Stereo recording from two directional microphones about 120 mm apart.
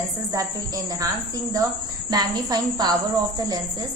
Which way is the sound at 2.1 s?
35° right (ahead or behind).